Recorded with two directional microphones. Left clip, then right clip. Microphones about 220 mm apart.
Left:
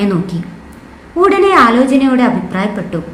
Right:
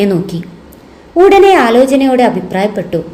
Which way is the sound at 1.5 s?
15° right (ahead or behind).